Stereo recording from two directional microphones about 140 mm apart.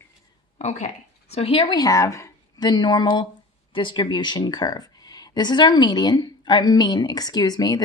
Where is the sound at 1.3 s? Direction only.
45° left (ahead or behind).